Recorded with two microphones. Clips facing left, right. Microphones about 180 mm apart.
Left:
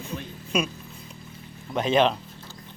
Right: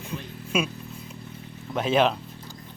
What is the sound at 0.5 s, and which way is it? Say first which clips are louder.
Speech: even; 5° right (ahead or behind).